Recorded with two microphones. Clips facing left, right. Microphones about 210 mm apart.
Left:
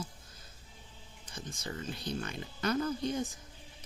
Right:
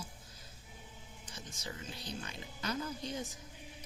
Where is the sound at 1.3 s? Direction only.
55° left (ahead or behind).